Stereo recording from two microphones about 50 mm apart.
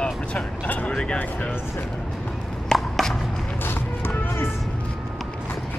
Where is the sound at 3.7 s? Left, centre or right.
Left.